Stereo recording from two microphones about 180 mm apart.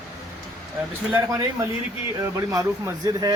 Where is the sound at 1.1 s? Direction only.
15° right (ahead or behind).